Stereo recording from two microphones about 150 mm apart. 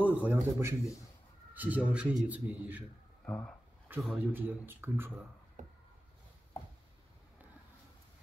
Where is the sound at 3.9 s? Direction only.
10° right (ahead or behind).